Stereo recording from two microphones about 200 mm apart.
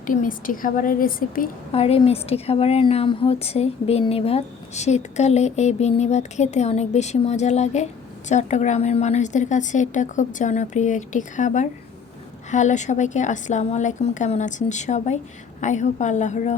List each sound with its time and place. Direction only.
0.0 s a woman's voice: 40° left (ahead or behind)
1.7 s speech: 30° left (ahead or behind)